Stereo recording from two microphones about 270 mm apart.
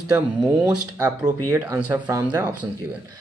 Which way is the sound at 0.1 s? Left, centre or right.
Centre.